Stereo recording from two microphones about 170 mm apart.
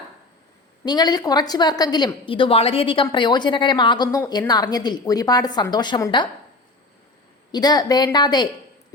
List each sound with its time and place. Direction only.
0.9 s a woman's voice: 25° left (ahead or behind)
7.5 s a woman's voice: 25° left (ahead or behind)